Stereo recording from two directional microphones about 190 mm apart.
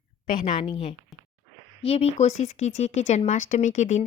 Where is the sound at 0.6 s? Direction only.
30° left (ahead or behind).